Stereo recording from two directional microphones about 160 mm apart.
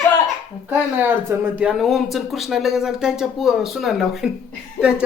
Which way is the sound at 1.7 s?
Centre (ahead or behind).